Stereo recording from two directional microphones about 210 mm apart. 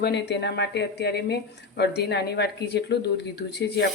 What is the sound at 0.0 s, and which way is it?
Speech, 55° left (ahead or behind).